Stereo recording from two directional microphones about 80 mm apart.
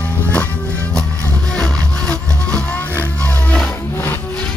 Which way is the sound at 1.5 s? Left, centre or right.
Centre.